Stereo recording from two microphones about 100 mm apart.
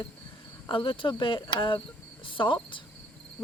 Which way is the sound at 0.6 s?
60° left (ahead or behind).